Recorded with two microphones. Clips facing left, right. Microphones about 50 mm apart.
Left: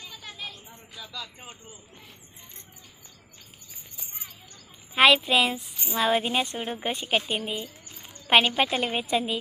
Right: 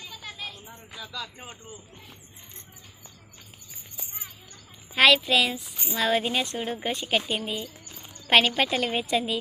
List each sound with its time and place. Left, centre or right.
0.0 s a sound: centre
1.0 s speech: centre
4.9 s a woman's voice: centre
5.5 s child singing: left
6.0 s a woman's voice: centre